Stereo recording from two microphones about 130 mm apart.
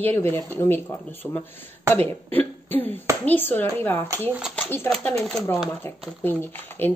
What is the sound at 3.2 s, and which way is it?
Speech, 15° left (ahead or behind).